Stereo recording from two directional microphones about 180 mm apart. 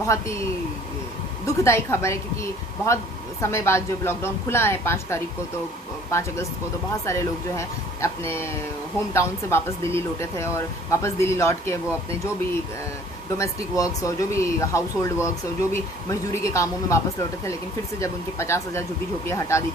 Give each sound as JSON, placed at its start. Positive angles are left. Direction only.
{"t": 0.0, "sound": "speech", "side_deg": 15}
{"t": 1.5, "sound": "speech", "side_deg": 15}
{"t": 13.3, "sound": "speech", "side_deg": 20}
{"t": 18.0, "sound": "speech", "side_deg": 15}